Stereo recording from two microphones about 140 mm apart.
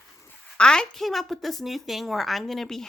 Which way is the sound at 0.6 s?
5° left (ahead or behind).